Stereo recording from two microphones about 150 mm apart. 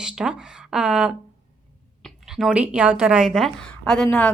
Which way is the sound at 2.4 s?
5° right (ahead or behind).